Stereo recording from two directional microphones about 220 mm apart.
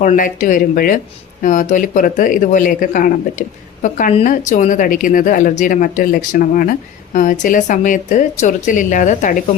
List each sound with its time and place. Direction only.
0.0 s speech: 35° left (ahead or behind)